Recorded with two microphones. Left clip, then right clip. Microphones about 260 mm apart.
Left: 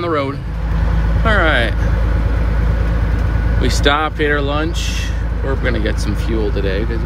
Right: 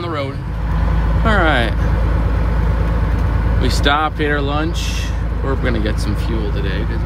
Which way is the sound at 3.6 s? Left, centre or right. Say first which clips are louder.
Left 1 dB; centre.